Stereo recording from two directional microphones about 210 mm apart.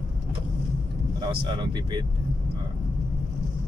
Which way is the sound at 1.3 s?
25° right (ahead or behind).